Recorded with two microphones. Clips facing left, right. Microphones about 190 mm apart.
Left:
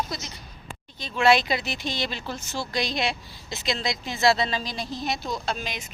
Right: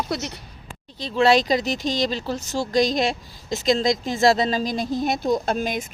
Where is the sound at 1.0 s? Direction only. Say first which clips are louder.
Right 3 dB; 35° right (ahead or behind); by 5.8 s 50° right (ahead or behind).